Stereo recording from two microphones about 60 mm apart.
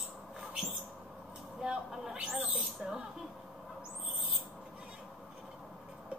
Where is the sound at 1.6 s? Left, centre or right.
Centre.